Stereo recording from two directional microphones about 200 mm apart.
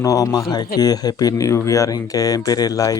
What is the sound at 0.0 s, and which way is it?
Speech, 15° left (ahead or behind).